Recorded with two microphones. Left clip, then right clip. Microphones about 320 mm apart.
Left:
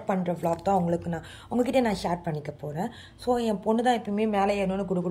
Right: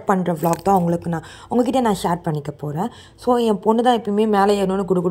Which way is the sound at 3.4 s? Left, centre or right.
Centre.